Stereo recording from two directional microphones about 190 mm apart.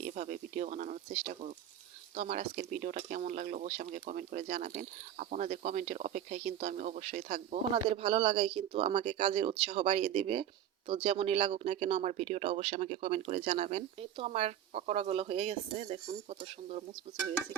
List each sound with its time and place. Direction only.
0.0 s speech: 40° right (ahead or behind)